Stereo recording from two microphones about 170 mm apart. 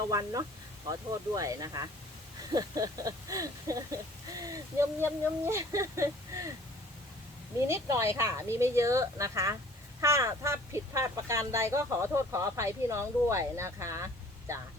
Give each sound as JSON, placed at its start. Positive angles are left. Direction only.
{"t": 0.1, "sound": "speech", "side_deg": -20}
{"t": 7.7, "sound": "speech", "side_deg": -15}